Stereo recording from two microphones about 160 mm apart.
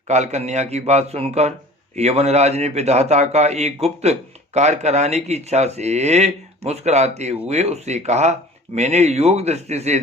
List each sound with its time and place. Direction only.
0.1 s a man's voice: 45° right (ahead or behind)